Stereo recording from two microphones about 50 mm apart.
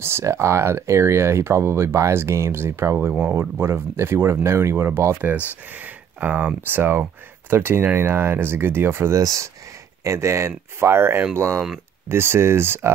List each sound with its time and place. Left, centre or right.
0.0 s speech: right
3.3 s speech: right
5.3 s speech: right
9.1 s speech: right
10.0 s speech: right
11.3 s speech: right
12.1 s speech: right